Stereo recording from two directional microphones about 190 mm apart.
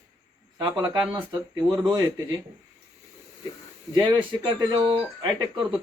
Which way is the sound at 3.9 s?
20° right (ahead or behind).